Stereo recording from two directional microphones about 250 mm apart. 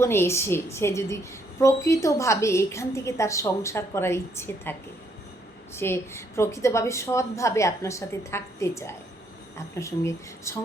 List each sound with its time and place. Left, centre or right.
0.0 s a woman's voice: centre